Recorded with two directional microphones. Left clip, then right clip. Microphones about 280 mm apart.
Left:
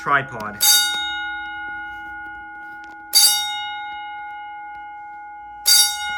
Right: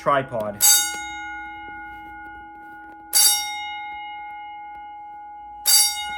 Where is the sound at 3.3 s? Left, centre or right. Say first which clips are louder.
Left 3 dB; left.